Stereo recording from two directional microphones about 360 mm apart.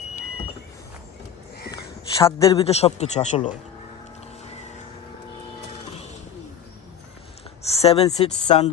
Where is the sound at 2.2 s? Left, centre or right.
Centre.